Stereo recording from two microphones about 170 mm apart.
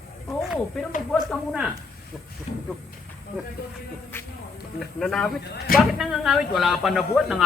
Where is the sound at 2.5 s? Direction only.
45° left (ahead or behind).